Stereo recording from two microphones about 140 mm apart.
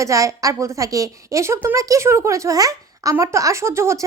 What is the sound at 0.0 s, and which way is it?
Speech, 25° right (ahead or behind).